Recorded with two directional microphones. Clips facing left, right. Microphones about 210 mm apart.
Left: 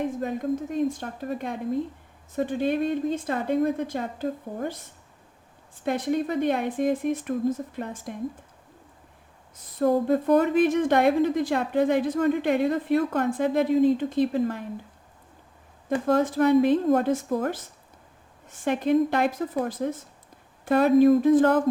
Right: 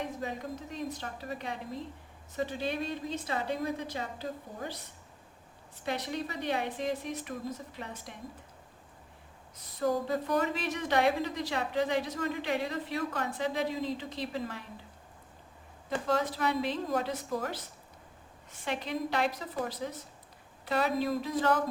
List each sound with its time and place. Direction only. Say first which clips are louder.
0.0 s a woman's voice: left 9 dB; 50° left (ahead or behind)
5.8 s a woman's voice: left 9 dB; 50° left (ahead or behind)
9.7 s a woman's voice: left 8 dB; 55° left (ahead or behind)
16.0 s a woman's voice: left 10 dB; 50° left (ahead or behind)